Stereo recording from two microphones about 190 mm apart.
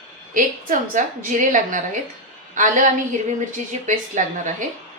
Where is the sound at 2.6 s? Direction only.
40° right (ahead or behind).